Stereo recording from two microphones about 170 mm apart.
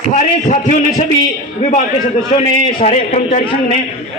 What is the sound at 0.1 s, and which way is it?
Speech, 45° left (ahead or behind).